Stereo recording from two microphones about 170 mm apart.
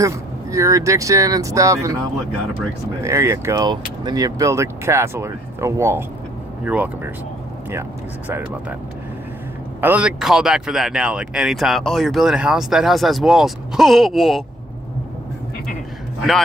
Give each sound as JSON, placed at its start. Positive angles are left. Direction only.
{"t": 0.5, "sound": "speech", "side_deg": -20}
{"t": 3.0, "sound": "speech", "side_deg": -15}
{"t": 9.8, "sound": "speech", "side_deg": -10}